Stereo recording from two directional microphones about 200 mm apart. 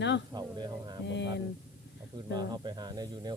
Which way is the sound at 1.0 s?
60° left (ahead or behind).